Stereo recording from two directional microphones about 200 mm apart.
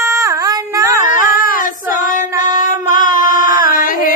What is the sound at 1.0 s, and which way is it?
Child singing, 40° left (ahead or behind).